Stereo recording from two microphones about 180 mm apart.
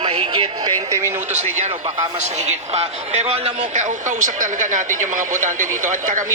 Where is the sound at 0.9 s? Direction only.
15° right (ahead or behind).